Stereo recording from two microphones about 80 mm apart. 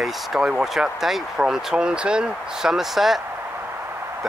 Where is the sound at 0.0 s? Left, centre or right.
Centre.